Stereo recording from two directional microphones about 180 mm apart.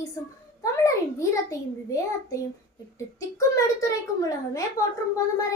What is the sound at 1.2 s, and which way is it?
A child's voice, 15° left (ahead or behind).